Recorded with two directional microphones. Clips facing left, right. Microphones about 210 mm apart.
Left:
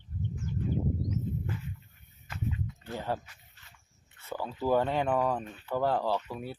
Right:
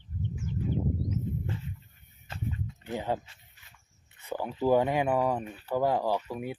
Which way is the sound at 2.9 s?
15° right (ahead or behind).